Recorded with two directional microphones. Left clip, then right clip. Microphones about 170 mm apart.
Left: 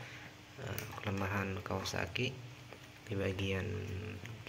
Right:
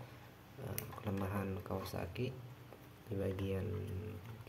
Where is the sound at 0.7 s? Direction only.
10° right (ahead or behind).